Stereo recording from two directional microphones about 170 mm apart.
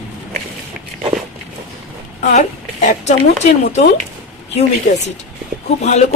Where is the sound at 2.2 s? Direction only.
45° left (ahead or behind).